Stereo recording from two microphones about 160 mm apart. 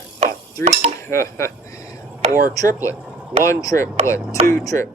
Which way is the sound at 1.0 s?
15° left (ahead or behind).